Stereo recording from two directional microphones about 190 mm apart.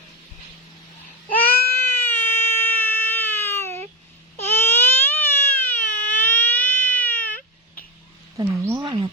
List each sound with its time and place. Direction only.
1.4 s baby cry: 10° left (ahead or behind)
4.4 s a sound: 10° left (ahead or behind)
8.4 s speech: 20° right (ahead or behind)